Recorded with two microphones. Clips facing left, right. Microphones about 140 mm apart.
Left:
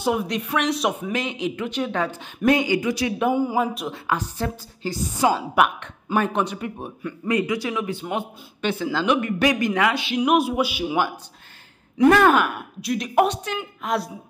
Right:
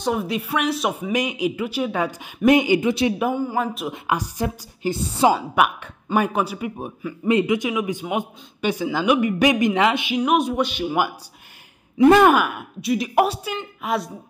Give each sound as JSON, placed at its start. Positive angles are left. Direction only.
{"t": 0.0, "sound": "a woman's voice", "side_deg": 0}
{"t": 3.5, "sound": "a woman's voice", "side_deg": 0}
{"t": 3.9, "sound": "speech", "side_deg": -15}
{"t": 7.2, "sound": "speech", "side_deg": -25}
{"t": 10.1, "sound": "a woman's voice", "side_deg": 5}
{"t": 12.1, "sound": "speech", "side_deg": -20}
{"t": 12.4, "sound": "a woman's voice", "side_deg": 0}